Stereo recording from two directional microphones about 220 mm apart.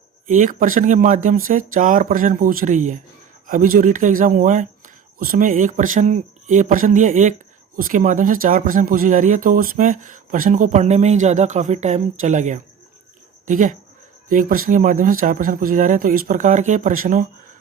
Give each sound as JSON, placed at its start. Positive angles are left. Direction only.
{"t": 0.3, "sound": "speech", "side_deg": -35}